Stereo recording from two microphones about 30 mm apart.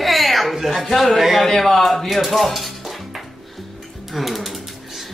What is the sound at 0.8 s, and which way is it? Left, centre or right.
Speech, centre.